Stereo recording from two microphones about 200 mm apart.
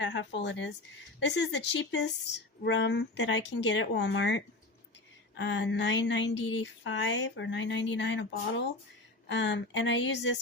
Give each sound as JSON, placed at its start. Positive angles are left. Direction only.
{"t": 0.0, "sound": "speech", "side_deg": 60}